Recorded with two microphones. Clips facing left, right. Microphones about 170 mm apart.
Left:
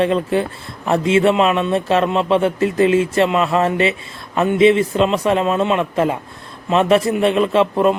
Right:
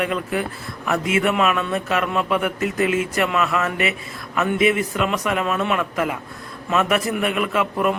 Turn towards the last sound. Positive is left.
turn(degrees=25)  # may be behind; listen again after turning